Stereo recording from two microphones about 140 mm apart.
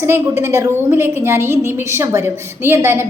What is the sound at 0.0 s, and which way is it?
A woman's voice, 20° right (ahead or behind).